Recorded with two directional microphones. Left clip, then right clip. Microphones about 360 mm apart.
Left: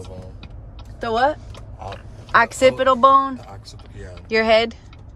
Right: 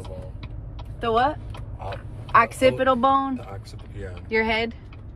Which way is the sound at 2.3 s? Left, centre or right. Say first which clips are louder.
Left 3 dB; left.